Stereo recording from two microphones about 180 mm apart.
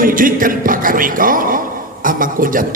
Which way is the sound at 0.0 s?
50° right (ahead or behind).